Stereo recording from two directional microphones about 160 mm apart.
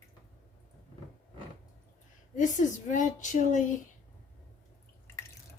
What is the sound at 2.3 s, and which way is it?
A woman's voice, 50° left (ahead or behind).